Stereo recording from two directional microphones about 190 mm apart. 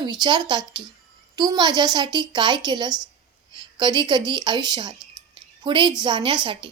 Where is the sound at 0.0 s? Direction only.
20° right (ahead or behind).